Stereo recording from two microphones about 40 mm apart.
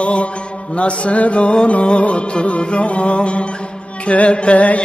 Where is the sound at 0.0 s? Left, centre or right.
Left.